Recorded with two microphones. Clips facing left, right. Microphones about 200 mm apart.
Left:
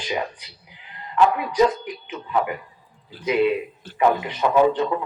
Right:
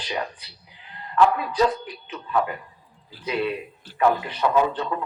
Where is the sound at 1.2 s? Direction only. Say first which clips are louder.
Left 2 dB; 15° left (ahead or behind).